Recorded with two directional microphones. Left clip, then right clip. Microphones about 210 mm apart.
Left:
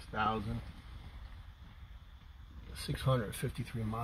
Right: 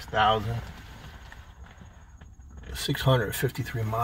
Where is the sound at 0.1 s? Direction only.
25° right (ahead or behind).